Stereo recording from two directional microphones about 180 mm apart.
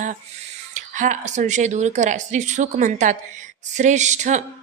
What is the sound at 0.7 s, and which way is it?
Speech, 45° right (ahead or behind).